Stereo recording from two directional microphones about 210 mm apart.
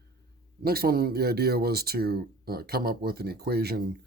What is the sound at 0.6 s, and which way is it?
Speech, 45° right (ahead or behind).